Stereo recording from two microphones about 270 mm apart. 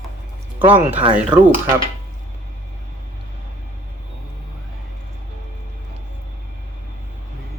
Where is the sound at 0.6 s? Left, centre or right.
Right.